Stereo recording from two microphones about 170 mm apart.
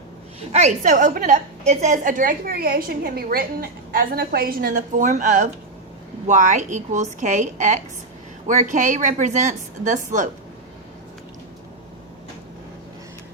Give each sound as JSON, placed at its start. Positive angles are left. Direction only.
{"t": 0.3, "sound": "a woman's voice", "side_deg": -40}